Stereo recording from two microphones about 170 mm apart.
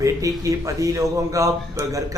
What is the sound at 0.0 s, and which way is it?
A man's voice, 20° right (ahead or behind).